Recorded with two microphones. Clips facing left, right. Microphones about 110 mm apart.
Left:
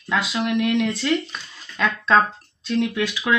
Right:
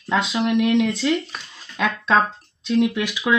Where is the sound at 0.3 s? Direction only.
15° right (ahead or behind).